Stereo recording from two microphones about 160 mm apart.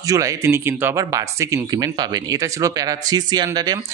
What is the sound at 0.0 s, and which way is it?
Speech, 20° right (ahead or behind).